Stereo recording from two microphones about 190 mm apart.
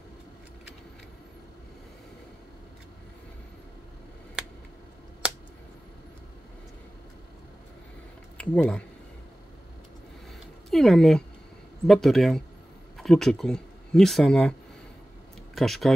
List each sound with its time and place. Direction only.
8.4 s speech: 5° left (ahead or behind)
10.7 s speech: centre (ahead or behind)
15.5 s speech: centre (ahead or behind)